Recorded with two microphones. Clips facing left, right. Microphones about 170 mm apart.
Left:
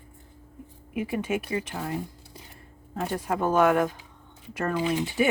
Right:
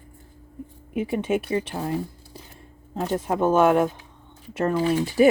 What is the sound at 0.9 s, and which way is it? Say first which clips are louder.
Speech: right 4 dB; 30° right (ahead or behind).